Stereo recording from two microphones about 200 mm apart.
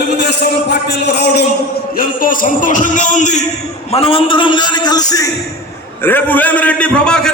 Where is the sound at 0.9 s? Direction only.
60° left (ahead or behind).